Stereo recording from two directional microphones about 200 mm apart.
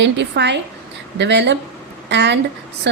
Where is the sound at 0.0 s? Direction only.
60° right (ahead or behind).